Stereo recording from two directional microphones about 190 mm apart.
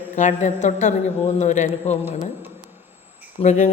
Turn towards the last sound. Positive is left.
turn(degrees=40)  # may be behind; listen again after turning